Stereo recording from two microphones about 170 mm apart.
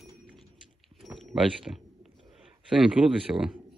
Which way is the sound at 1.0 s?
Centre (ahead or behind).